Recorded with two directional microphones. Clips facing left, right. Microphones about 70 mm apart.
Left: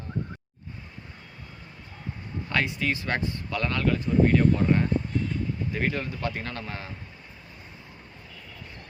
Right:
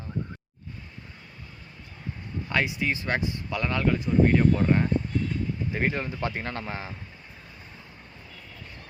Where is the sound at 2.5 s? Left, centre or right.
Centre.